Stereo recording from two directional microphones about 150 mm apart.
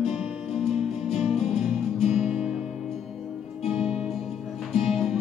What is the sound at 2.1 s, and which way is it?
Music, 5° right (ahead or behind).